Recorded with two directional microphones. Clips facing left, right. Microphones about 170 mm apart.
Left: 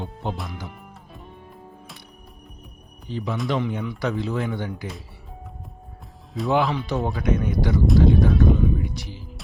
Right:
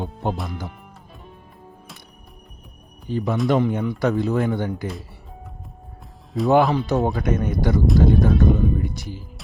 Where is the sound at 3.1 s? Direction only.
50° right (ahead or behind).